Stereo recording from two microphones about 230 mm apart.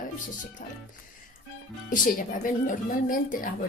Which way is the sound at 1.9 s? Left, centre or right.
Left.